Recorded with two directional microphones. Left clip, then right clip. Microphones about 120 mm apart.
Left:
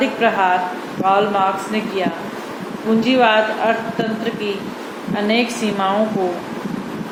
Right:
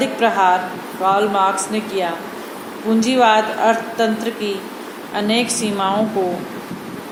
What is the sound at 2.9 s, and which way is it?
Speech, 60° right (ahead or behind).